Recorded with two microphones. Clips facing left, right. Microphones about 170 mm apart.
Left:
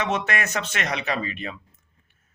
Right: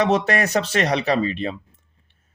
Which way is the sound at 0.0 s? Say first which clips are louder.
Right 7 dB; 35° right (ahead or behind).